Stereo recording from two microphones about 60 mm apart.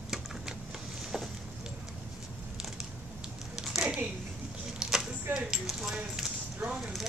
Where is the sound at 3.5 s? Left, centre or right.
Centre.